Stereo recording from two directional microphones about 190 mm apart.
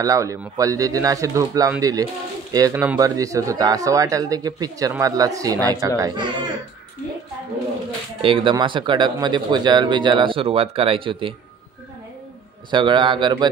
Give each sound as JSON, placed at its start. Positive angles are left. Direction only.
{"t": 0.0, "sound": "speech", "side_deg": -15}
{"t": 8.2, "sound": "speech", "side_deg": -30}
{"t": 12.7, "sound": "speech", "side_deg": -25}